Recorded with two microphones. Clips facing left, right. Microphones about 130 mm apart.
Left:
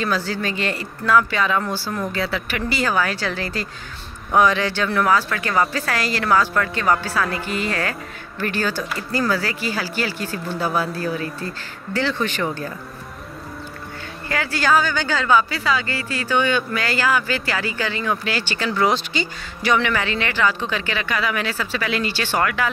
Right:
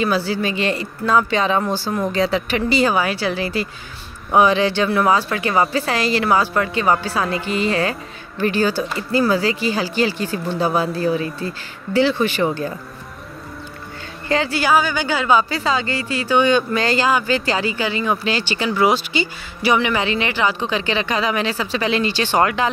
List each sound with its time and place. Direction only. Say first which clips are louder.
0.0 s speech: right 4 dB; 15° right (ahead or behind)
14.3 s speech: right 6 dB; 25° right (ahead or behind)
14.6 s speech: left 2 dB; 10° right (ahead or behind)
18.7 s speech: right 3 dB; 10° right (ahead or behind); by 22.7 s 25° right (ahead or behind)